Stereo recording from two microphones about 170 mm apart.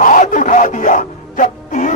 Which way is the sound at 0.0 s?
50° left (ahead or behind).